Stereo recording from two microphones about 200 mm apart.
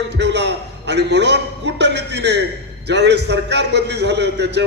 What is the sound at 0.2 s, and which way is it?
A man's voice, 60° right (ahead or behind).